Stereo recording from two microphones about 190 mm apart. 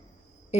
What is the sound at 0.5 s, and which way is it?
Cricket, 35° left (ahead or behind).